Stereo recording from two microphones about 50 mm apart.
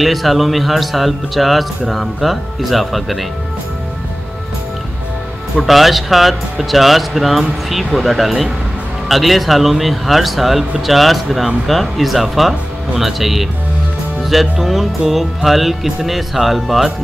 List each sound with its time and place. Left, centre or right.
0.0 s speech: centre
5.6 s speech: centre